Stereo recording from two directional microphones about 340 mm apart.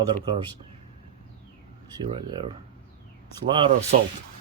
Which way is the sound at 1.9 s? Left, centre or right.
Centre.